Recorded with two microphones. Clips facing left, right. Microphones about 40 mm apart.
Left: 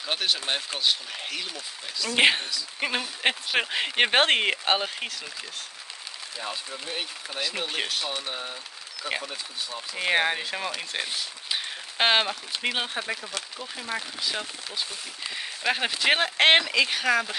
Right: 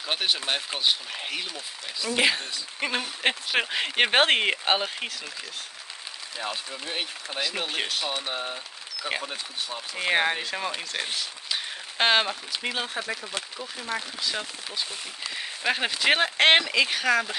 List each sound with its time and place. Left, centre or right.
0.0 s speech: centre
2.1 s speech: left
2.8 s speech: centre
6.5 s speech: right
7.2 s speech: centre
8.1 s speech: right
9.9 s speech: centre
12.6 s speech: left
13.6 s speech: centre